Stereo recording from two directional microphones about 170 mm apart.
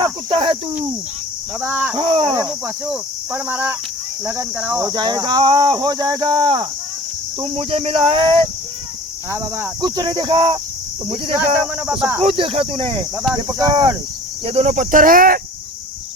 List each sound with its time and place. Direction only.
0.0 s cricket: 30° right (ahead or behind)
1.6 s speech: 5° right (ahead or behind)
2.0 s speech: 25° right (ahead or behind)
3.3 s speech: 10° right (ahead or behind)
4.9 s speech: 25° right (ahead or behind)
11.9 s speech: 10° right (ahead or behind)
12.2 s speech: 35° right (ahead or behind)
13.6 s speech: 15° right (ahead or behind)
14.4 s insect: 40° right (ahead or behind); by 15.4 s 55° right (ahead or behind)